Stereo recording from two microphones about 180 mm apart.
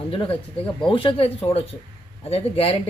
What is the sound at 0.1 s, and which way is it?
Speech, 30° left (ahead or behind).